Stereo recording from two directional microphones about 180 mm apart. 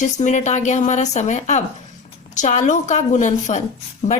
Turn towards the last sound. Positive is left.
turn(degrees=40)  # may be behind; listen again after turning